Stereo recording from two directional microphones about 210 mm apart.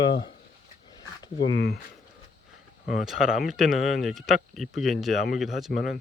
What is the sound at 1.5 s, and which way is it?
Speech, 50° left (ahead or behind).